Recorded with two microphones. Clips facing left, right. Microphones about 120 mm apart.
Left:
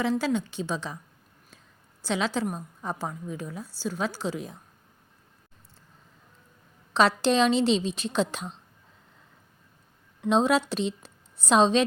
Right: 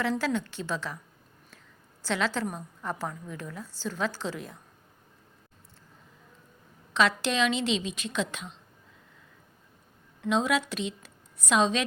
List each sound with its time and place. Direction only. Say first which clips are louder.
0.0 s a woman's voice: left 2 dB; 15° left (ahead or behind)
2.0 s a woman's voice: left 2 dB; 15° left (ahead or behind)
6.9 s a woman's voice: left 4 dB; 35° left (ahead or behind)
10.2 s a woman's voice: left 4 dB; 30° left (ahead or behind)